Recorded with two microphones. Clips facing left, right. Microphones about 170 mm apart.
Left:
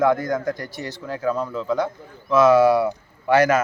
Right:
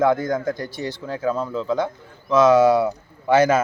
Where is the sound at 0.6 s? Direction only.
25° right (ahead or behind).